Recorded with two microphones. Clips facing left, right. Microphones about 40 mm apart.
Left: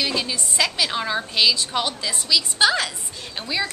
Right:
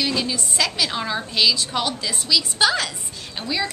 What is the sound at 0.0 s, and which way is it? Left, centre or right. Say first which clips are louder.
A woman's voice: right 1 dB; centre.